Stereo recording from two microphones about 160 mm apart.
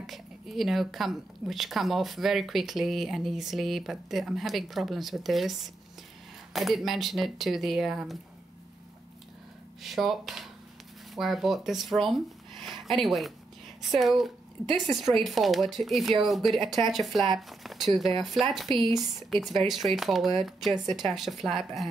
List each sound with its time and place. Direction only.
0.0 s speech: centre (ahead or behind)
9.8 s speech: centre (ahead or behind)